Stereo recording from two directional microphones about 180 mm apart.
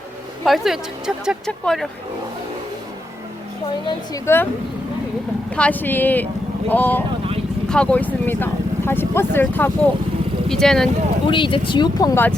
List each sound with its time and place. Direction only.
0.4 s a woman's voice: centre (ahead or behind)
3.8 s speech: 15° left (ahead or behind)
5.5 s a woman's voice: 5° left (ahead or behind)
11.3 s speech: 25° left (ahead or behind)